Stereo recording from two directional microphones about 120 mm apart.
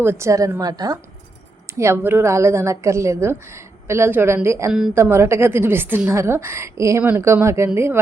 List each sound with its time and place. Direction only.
0.0 s a woman's voice: 20° right (ahead or behind)
1.8 s a woman's voice: 20° right (ahead or behind)